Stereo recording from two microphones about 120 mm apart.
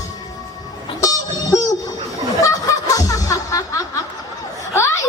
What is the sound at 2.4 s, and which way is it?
Snicker, 30° left (ahead or behind).